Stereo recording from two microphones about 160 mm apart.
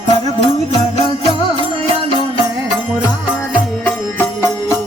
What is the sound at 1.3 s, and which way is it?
Music, 35° right (ahead or behind).